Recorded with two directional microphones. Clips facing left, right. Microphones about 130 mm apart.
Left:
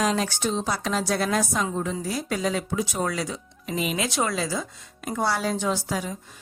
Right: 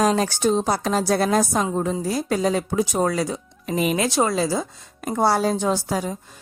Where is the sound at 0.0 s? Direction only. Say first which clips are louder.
Right 5 dB; 40° right (ahead or behind).